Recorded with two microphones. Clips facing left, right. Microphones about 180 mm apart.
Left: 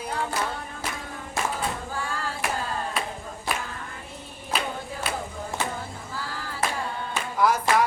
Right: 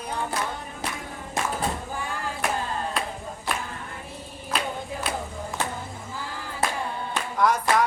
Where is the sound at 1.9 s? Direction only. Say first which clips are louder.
Even; 20° right (ahead or behind).